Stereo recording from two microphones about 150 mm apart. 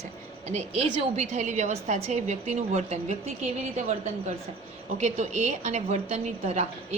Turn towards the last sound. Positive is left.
turn(degrees=-45)  # may be behind; listen again after turning